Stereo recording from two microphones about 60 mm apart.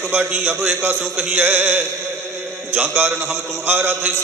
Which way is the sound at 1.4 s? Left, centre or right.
Right.